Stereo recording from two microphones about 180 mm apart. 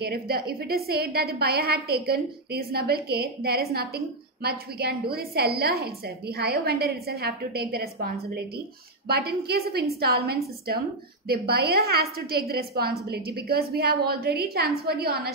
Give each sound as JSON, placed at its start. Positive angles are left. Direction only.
{"t": 0.0, "sound": "a woman's voice", "side_deg": -60}